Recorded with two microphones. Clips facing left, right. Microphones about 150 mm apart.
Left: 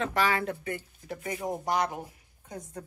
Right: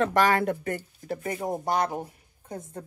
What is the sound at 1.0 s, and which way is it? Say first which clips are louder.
Speech: right 3 dB; 30° right (ahead or behind).